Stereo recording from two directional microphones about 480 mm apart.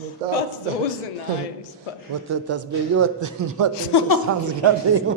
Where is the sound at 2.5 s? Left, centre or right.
Right.